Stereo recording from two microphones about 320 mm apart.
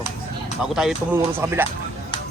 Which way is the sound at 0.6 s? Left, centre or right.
Centre.